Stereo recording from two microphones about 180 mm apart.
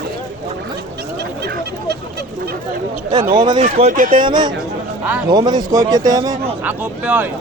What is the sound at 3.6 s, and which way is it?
Speech, 40° right (ahead or behind).